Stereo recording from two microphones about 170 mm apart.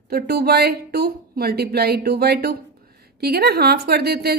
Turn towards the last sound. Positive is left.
turn(degrees=-70)  # may be behind; listen again after turning